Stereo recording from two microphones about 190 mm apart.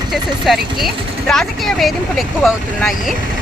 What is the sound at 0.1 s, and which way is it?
Speech, centre (ahead or behind).